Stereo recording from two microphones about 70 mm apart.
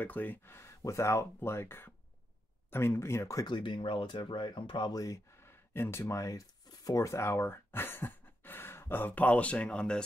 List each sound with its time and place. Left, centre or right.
0.0 s speech: left
0.6 s speech: left
3.4 s speech: left
4.9 s speech: left
5.4 s speech: left; by 10.0 s centre